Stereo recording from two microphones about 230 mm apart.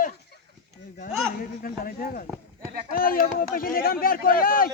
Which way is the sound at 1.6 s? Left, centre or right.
Left.